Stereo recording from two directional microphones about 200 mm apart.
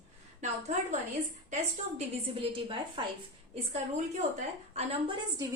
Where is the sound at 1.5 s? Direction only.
30° right (ahead or behind).